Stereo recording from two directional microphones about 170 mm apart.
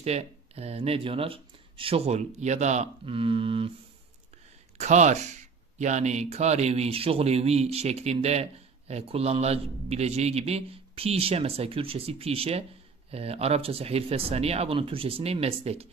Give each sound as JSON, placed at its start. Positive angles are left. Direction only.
{"t": 0.0, "sound": "speech", "side_deg": -35}
{"t": 4.7, "sound": "speech", "side_deg": -45}